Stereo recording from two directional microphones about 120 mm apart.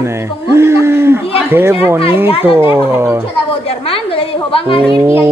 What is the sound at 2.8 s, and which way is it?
Speech, 20° right (ahead or behind).